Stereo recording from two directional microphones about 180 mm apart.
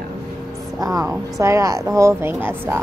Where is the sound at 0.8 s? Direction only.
20° right (ahead or behind).